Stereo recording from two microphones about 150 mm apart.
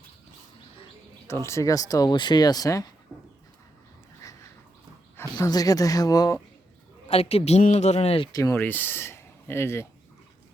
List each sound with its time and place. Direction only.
1.3 s speech: 20° left (ahead or behind)
4.2 s a sound: 20° left (ahead or behind)
5.5 s speech: 25° left (ahead or behind)
7.1 s a man's voice: 40° left (ahead or behind)
8.3 s speech: 20° left (ahead or behind)